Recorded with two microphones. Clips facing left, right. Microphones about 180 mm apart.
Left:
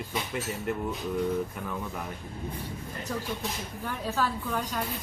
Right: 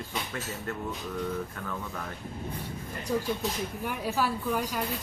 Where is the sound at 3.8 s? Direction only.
10° right (ahead or behind).